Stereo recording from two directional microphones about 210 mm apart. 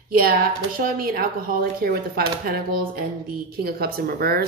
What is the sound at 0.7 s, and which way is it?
A woman's voice, 45° right (ahead or behind).